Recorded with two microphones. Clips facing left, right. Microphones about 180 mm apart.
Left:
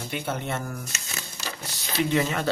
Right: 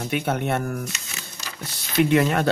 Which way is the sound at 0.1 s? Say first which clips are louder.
Right 6 dB; 60° right (ahead or behind).